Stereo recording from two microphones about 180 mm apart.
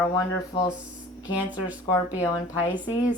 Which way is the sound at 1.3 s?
10° right (ahead or behind).